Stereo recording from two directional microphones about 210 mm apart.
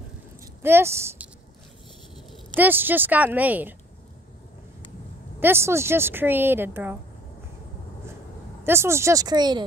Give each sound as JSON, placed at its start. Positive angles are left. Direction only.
{"t": 0.6, "sound": "speech", "side_deg": -10}
{"t": 2.5, "sound": "speech", "side_deg": -10}
{"t": 5.4, "sound": "speech", "side_deg": -10}
{"t": 8.6, "sound": "speech", "side_deg": -10}